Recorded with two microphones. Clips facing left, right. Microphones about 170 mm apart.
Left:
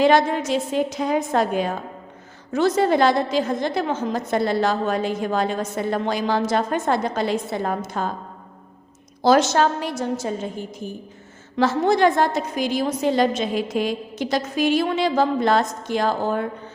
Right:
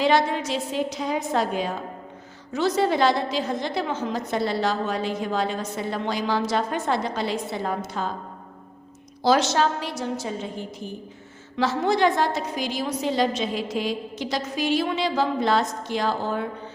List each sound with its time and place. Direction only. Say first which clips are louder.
0.0 s a woman's voice: left 4 dB; 50° left (ahead or behind)
9.2 s a woman's voice: left 4 dB; 50° left (ahead or behind)
11.5 s a woman's voice: left 4 dB; 50° left (ahead or behind)